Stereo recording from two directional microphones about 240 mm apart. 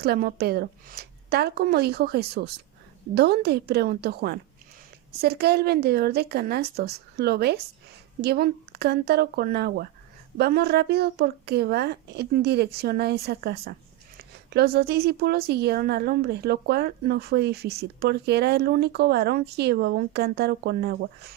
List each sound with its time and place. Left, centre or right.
0.0 s a woman's voice: right